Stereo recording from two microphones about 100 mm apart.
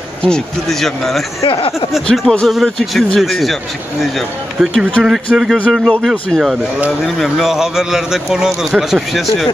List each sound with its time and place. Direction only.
0.2 s a man's voice: 5° left (ahead or behind)
1.4 s speech: 70° left (ahead or behind)
2.1 s a man's voice: centre (ahead or behind)
4.6 s a man's voice: 5° left (ahead or behind)